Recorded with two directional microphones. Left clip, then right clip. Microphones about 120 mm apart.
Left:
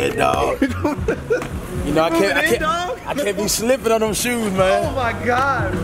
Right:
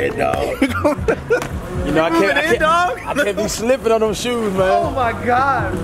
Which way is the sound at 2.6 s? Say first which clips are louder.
Right 6 dB; 35° right (ahead or behind).